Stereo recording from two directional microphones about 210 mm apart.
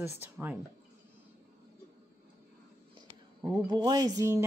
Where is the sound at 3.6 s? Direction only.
20° right (ahead or behind).